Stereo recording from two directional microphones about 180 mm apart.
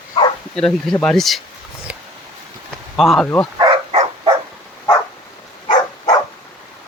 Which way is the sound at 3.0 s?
Centre (ahead or behind).